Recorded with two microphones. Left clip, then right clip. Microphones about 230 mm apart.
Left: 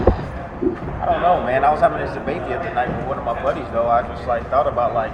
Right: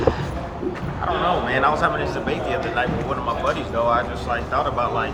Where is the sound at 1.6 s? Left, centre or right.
Centre.